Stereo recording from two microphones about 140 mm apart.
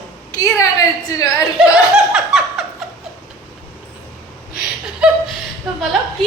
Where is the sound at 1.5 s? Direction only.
5° right (ahead or behind).